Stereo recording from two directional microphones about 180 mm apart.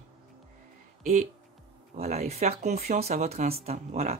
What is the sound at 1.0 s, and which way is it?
Speech, 40° right (ahead or behind).